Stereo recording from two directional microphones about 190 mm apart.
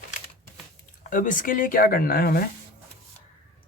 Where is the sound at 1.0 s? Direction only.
45° left (ahead or behind).